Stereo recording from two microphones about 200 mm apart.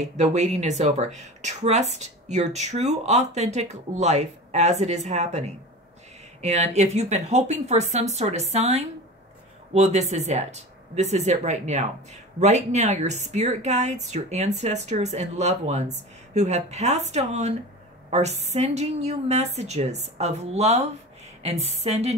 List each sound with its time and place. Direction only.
0.0 s a woman's voice: 35° right (ahead or behind)